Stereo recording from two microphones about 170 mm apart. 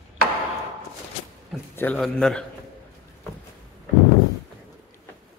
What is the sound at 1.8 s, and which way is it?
Speech, 5° left (ahead or behind).